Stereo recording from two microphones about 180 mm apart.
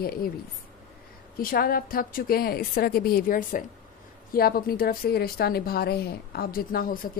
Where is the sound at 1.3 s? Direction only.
55° left (ahead or behind).